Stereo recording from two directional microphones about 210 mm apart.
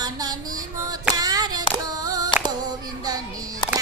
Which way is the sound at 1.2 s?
15° right (ahead or behind).